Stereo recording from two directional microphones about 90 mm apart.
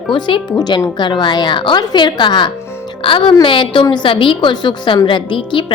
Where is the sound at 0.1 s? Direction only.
70° left (ahead or behind).